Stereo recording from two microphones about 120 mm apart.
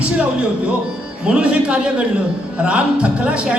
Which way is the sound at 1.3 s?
10° right (ahead or behind).